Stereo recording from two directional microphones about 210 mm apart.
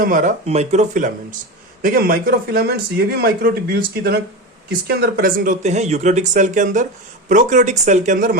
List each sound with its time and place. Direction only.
0.0 s a man's voice: 40° right (ahead or behind)